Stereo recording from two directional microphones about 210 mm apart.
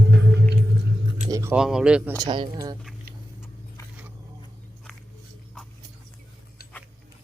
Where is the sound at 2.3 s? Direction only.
20° right (ahead or behind).